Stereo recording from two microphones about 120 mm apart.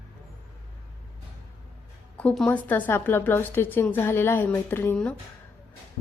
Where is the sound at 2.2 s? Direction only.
10° left (ahead or behind).